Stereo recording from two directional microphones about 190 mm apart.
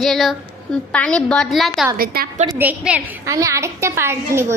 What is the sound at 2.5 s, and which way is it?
A woman's voice, 10° right (ahead or behind).